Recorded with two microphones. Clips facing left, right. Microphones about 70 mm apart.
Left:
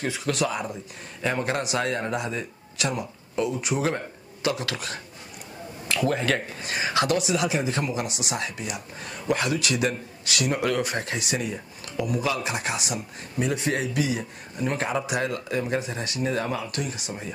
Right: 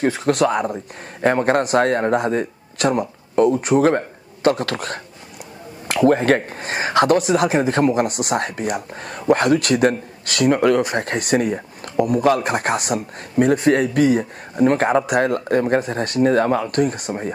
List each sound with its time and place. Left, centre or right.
0.0 s a man's voice: right
6.0 s speech: right